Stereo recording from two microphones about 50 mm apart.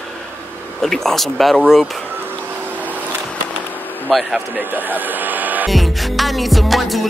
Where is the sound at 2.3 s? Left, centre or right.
Right.